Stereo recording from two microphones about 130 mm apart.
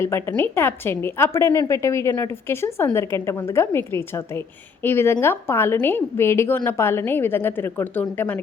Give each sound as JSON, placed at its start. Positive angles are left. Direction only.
{"t": 0.1, "sound": "a woman's voice", "side_deg": 20}